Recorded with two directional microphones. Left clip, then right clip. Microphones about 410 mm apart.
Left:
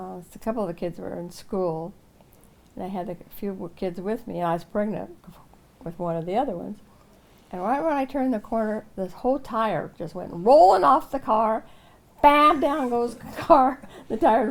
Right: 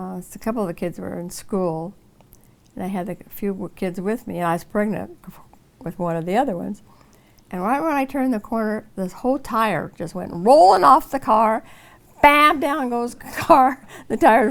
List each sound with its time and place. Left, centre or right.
0.0 s speech: right